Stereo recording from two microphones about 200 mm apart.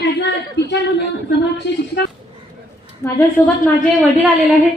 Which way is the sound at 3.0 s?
15° left (ahead or behind).